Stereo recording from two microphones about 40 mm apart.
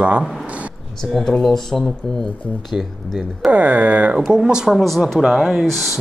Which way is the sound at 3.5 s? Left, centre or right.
Right.